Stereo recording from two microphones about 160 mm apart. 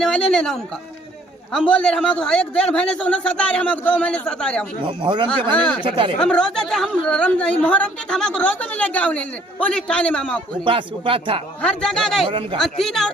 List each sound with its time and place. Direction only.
0.0 s a man's voice: 5° left (ahead or behind)
5.0 s speech: 30° right (ahead or behind)
5.3 s a man's voice: 5° left (ahead or behind)
5.8 s speech: 30° right (ahead or behind)
6.1 s a woman's voice: 5° left (ahead or behind)
10.7 s speech: 35° right (ahead or behind)
11.6 s a man's voice: 5° left (ahead or behind)